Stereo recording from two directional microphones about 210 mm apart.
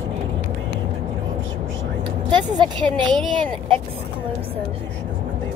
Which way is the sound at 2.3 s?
20° right (ahead or behind).